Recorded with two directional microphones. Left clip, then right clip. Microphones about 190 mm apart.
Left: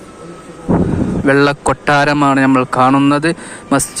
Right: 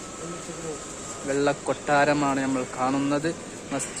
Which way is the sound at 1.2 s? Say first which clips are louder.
Left 13 dB; 40° left (ahead or behind).